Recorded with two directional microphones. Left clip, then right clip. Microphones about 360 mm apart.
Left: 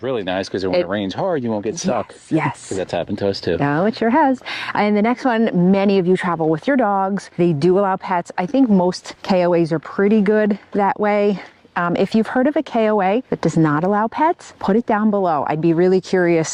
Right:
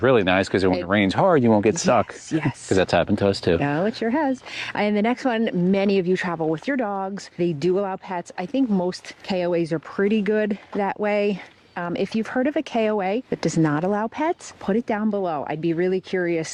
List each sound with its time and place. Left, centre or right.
0.0 s speech: right
0.3 s speech: right
3.2 s speech: centre
3.6 s speech: centre
11.7 s speech: left